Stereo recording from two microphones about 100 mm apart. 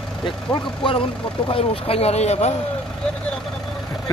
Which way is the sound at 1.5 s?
75° left (ahead or behind).